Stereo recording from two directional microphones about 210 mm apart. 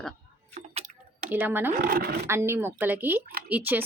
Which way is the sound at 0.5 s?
30° right (ahead or behind).